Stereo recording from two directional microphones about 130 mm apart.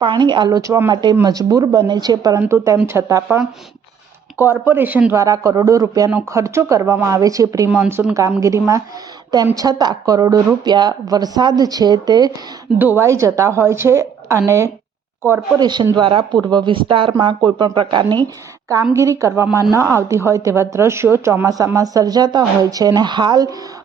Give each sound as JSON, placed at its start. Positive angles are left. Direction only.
{"t": 0.0, "sound": "a woman's voice", "side_deg": -35}
{"t": 2.4, "sound": "a woman's voice", "side_deg": -15}
{"t": 4.4, "sound": "speech", "side_deg": -15}
{"t": 5.1, "sound": "a woman's voice", "side_deg": -25}
{"t": 12.8, "sound": "a woman's voice", "side_deg": -15}
{"t": 15.5, "sound": "a woman's voice", "side_deg": -35}
{"t": 18.9, "sound": "a woman's voice", "side_deg": -25}